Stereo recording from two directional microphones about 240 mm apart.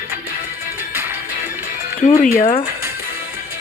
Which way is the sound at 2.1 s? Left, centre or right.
Left.